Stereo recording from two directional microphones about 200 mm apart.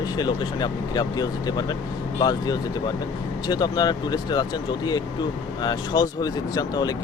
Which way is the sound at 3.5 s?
20° left (ahead or behind).